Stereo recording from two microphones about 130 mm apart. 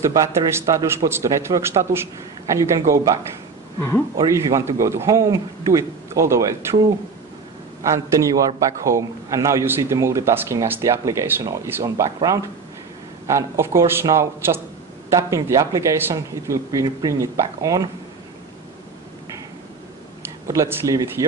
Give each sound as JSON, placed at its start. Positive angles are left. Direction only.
{"t": 0.0, "sound": "a man's voice", "side_deg": -25}
{"t": 4.3, "sound": "a man's voice", "side_deg": -25}
{"t": 7.8, "sound": "a man's voice", "side_deg": -25}
{"t": 20.4, "sound": "a man's voice", "side_deg": -25}